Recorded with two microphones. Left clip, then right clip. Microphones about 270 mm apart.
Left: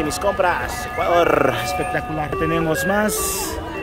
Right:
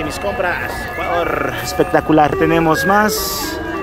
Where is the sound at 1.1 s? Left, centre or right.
Left.